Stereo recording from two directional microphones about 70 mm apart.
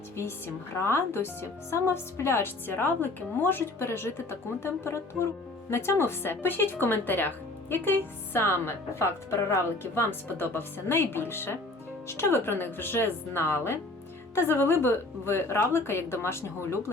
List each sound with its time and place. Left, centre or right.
0.2 s speech: left